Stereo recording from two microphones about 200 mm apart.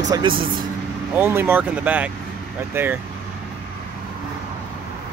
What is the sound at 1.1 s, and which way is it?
Speech, 10° right (ahead or behind).